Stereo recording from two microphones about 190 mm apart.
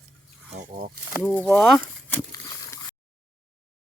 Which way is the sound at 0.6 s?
50° right (ahead or behind).